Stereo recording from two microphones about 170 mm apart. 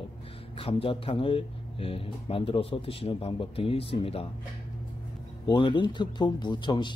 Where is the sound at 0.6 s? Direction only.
35° left (ahead or behind).